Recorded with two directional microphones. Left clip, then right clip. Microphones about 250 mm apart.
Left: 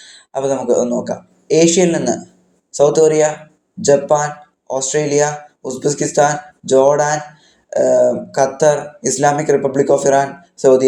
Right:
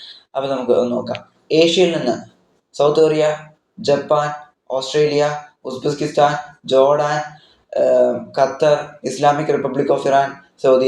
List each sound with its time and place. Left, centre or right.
0.3 s speech: left